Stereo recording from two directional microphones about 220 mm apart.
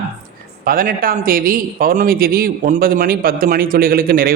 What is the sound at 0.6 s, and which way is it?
A man's voice, 40° right (ahead or behind).